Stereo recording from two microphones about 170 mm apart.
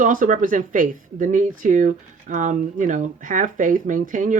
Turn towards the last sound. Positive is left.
turn(degrees=-50)  # may be behind; listen again after turning